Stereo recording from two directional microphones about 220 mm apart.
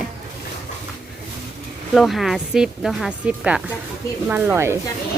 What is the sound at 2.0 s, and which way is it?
A woman's voice, centre (ahead or behind).